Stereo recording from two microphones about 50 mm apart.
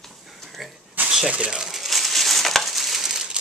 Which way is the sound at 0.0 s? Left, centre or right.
Centre.